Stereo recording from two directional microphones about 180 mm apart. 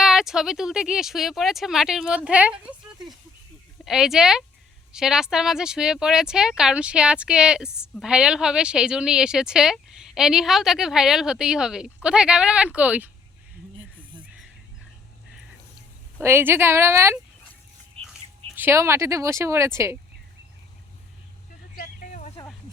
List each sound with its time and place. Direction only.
0.0 s speech: centre (ahead or behind)
3.8 s speech: centre (ahead or behind)
16.2 s speech: 10° right (ahead or behind)
18.5 s speech: 15° right (ahead or behind)
21.8 s vehicle: 45° left (ahead or behind)